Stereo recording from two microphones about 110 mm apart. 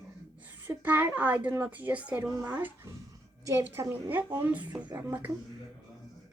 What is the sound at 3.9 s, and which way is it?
A child's voice, 15° right (ahead or behind).